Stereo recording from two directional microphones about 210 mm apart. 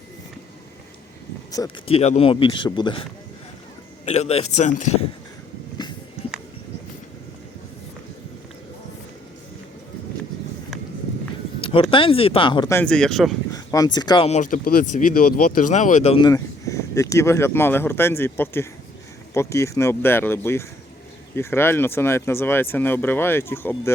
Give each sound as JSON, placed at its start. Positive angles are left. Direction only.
{"t": 1.6, "sound": "speech", "side_deg": 15}
{"t": 1.9, "sound": "speech", "side_deg": 30}
{"t": 11.6, "sound": "speech", "side_deg": 25}
{"t": 13.5, "sound": "speech", "side_deg": 15}
{"t": 14.5, "sound": "speech", "side_deg": 45}